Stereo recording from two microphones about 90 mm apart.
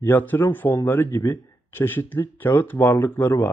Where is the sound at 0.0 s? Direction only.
20° left (ahead or behind).